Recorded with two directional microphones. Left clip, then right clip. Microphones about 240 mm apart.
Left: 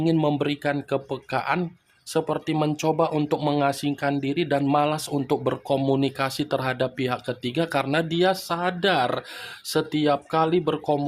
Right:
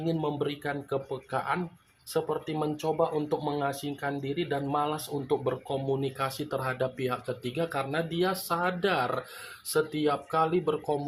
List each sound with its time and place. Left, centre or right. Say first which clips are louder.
0.0 s speech: left 8 dB; left